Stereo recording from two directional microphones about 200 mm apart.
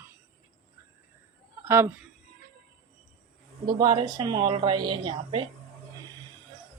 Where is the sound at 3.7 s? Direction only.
20° right (ahead or behind).